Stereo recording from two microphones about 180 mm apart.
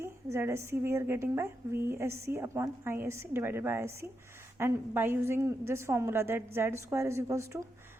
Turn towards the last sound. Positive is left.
turn(degrees=-15)  # may be behind; listen again after turning